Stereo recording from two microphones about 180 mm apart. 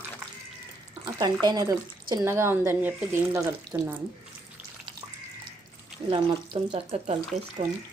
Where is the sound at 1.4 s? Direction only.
25° right (ahead or behind).